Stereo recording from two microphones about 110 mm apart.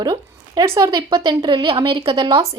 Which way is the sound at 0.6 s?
25° right (ahead or behind).